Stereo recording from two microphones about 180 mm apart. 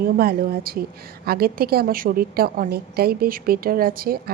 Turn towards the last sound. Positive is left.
turn(degrees=-55)  # may be behind; listen again after turning